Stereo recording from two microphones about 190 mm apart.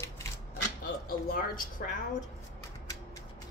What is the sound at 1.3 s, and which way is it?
Speech, 50° left (ahead or behind).